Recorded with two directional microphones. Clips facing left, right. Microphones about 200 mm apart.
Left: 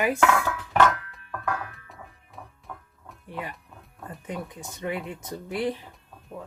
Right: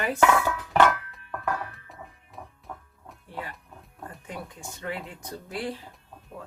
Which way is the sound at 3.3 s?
15° left (ahead or behind).